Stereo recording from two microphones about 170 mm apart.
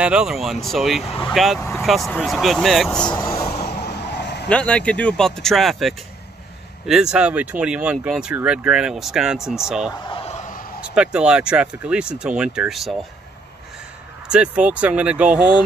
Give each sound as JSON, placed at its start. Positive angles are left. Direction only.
{"t": 0.0, "sound": "speech", "side_deg": -5}
{"t": 1.0, "sound": "speech", "side_deg": 35}
{"t": 1.3, "sound": "speech", "side_deg": 0}
{"t": 3.1, "sound": "speech", "side_deg": 25}
{"t": 3.6, "sound": "vehicle", "side_deg": 80}
{"t": 4.5, "sound": "speech", "side_deg": 5}
{"t": 10.0, "sound": "a sound", "side_deg": 35}
{"t": 10.8, "sound": "speech", "side_deg": -5}
{"t": 14.3, "sound": "speech", "side_deg": -5}